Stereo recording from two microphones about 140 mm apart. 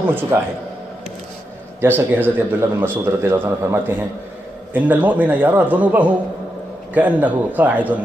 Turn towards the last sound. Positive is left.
turn(degrees=-10)  # may be behind; listen again after turning